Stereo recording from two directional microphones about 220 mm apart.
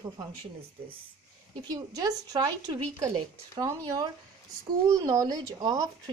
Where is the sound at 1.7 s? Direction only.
20° right (ahead or behind).